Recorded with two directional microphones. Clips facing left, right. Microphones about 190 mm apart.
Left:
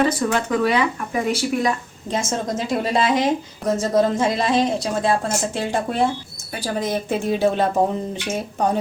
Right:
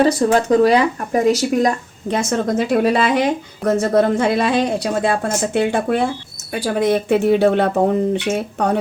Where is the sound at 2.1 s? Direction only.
60° right (ahead or behind).